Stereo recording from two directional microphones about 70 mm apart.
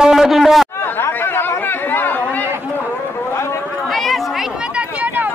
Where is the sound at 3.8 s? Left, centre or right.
Centre; by 5.3 s right.